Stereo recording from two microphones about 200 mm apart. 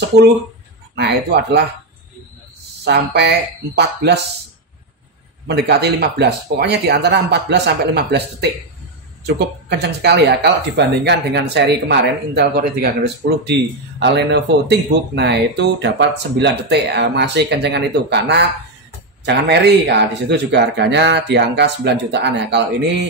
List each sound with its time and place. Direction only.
0.9 s speech: 55° right (ahead or behind)
2.8 s speech: 55° right (ahead or behind)
5.5 s speech: 55° right (ahead or behind)